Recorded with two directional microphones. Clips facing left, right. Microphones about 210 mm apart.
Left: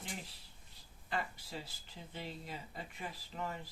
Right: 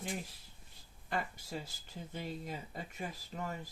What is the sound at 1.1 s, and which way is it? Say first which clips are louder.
Speech: right 2 dB; 45° right (ahead or behind).